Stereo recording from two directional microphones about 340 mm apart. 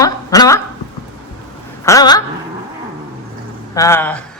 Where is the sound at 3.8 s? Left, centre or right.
Centre.